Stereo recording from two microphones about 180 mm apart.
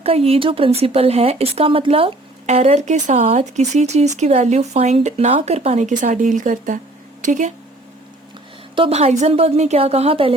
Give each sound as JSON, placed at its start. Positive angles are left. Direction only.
{"t": 0.0, "sound": "speech", "side_deg": -35}
{"t": 8.7, "sound": "a woman's voice", "side_deg": -30}